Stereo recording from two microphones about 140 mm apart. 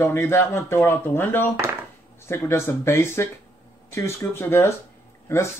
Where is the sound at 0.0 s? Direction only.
15° left (ahead or behind).